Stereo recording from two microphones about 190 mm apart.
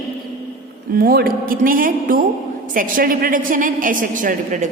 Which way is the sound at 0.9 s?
55° right (ahead or behind).